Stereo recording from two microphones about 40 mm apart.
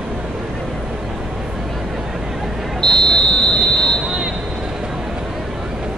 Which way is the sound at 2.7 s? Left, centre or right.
Centre.